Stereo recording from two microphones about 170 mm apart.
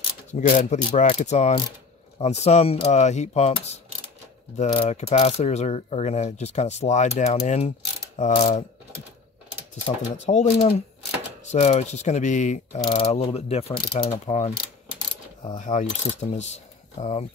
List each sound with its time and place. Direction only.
0.3 s speech: 45° left (ahead or behind)
2.1 s mechanisms: 40° left (ahead or behind)
10.3 s mechanisms: 40° left (ahead or behind)
15.5 s speech: 45° left (ahead or behind)